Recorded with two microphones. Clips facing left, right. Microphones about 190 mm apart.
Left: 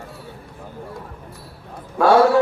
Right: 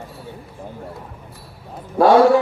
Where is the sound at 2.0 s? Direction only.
15° right (ahead or behind).